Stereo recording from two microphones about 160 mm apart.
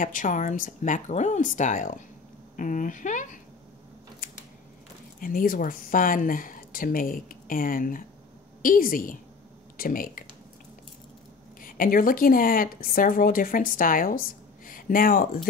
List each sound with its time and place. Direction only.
0.0 s speech: 55° left (ahead or behind)
4.2 s scissors: 65° left (ahead or behind)
5.2 s speech: 60° left (ahead or behind)
11.6 s a woman's voice: 60° left (ahead or behind)